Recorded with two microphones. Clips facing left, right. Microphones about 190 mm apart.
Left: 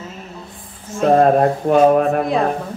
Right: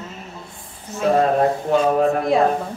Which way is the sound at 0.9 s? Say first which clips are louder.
Left 4 dB; 50° left (ahead or behind).